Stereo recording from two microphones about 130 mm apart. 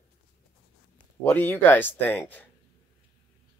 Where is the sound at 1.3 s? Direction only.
15° left (ahead or behind).